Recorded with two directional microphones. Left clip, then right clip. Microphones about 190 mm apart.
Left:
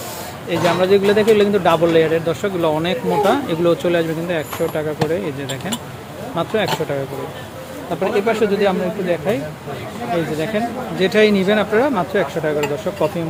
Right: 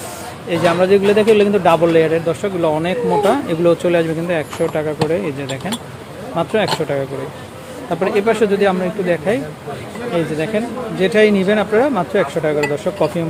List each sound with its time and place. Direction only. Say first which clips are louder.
0.5 s a man's voice: right 2 dB; 15° right (ahead or behind)
8.0 s speech: right 2 dB; 20° right (ahead or behind)
10.5 s a man's voice: even; 10° right (ahead or behind)